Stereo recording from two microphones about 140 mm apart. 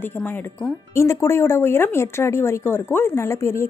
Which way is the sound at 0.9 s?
20° left (ahead or behind).